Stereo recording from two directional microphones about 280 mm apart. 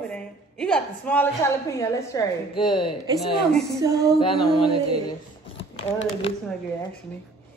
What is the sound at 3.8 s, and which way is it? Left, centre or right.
Music, centre.